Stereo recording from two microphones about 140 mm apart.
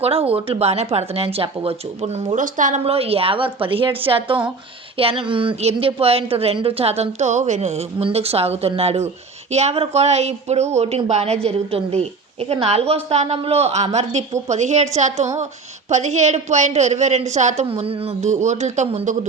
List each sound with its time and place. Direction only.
0.0 s speech: 45° right (ahead or behind); by 2.8 s 65° right (ahead or behind)
2.8 s a woman's voice: 45° right (ahead or behind)